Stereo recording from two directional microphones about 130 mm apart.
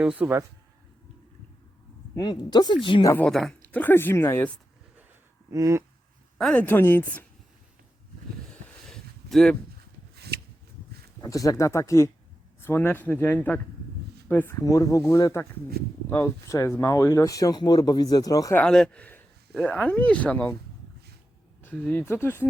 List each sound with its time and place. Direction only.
0.0 s speech: 10° right (ahead or behind)
2.1 s speech: 35° left (ahead or behind)
3.2 s speech: 5° left (ahead or behind)
3.7 s speech: 15° left (ahead or behind)
5.5 s speech: 25° right (ahead or behind)
6.4 s speech: 10° left (ahead or behind)
8.4 s a sound: 5° left (ahead or behind)
11.2 s speech: 25° left (ahead or behind)
18.5 s speech: 5° left (ahead or behind)
21.6 s speech: 10° left (ahead or behind)